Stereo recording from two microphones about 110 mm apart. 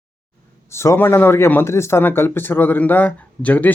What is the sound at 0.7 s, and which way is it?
Speech, 25° left (ahead or behind).